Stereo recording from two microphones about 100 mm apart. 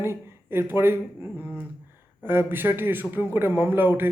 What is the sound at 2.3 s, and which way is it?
Speech, 20° right (ahead or behind).